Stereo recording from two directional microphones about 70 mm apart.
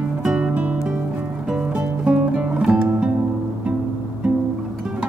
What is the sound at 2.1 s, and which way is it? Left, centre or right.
Music, centre.